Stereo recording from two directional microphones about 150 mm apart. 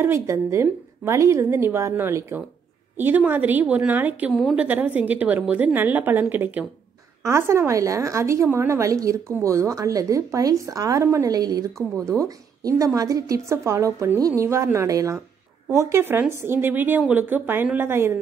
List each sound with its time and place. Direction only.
0.0 s a woman's voice: 20° right (ahead or behind)
4.3 s a woman's voice: centre (ahead or behind)
4.6 s a woman's voice: 10° right (ahead or behind)